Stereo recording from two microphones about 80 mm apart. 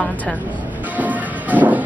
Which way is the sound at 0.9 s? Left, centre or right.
Centre.